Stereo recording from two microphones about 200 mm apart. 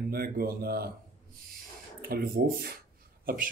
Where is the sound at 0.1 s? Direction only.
50° right (ahead or behind).